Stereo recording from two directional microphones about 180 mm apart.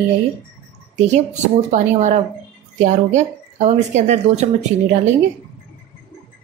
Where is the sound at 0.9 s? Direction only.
40° right (ahead or behind).